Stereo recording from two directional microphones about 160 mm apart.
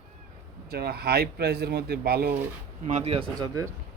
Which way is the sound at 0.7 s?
80° right.